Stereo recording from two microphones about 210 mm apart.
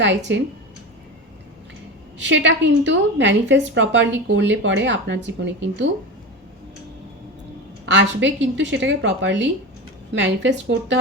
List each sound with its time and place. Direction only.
0.3 s speech: 60° right (ahead or behind)
2.1 s speech: 60° right (ahead or behind)
7.9 s speech: 60° right (ahead or behind)